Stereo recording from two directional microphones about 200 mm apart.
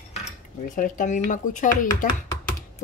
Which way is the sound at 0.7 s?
40° left (ahead or behind).